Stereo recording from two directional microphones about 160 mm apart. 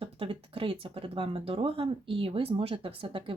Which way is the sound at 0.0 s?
35° right (ahead or behind).